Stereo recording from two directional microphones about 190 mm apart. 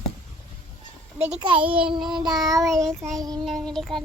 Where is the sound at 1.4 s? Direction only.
25° right (ahead or behind).